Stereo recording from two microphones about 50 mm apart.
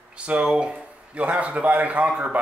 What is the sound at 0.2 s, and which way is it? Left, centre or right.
A man's voice, right.